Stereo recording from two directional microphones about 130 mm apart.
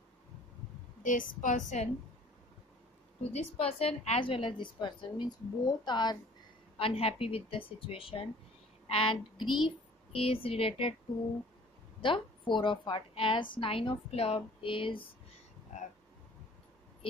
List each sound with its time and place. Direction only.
1.0 s a woman's voice: 85° left; by 1.9 s 70° left (ahead or behind)
3.2 s a woman's voice: 50° left (ahead or behind); by 6.1 s 35° left (ahead or behind)
6.8 s a woman's voice: 45° left (ahead or behind)
12.0 s a woman's voice: 40° left (ahead or behind)
15.7 s a sound: 70° left (ahead or behind)